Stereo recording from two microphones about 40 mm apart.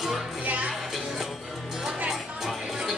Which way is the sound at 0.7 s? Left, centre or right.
Centre.